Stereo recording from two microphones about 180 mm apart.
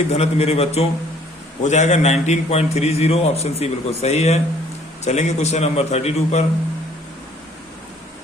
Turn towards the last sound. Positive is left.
turn(degrees=35)  # may be behind; listen again after turning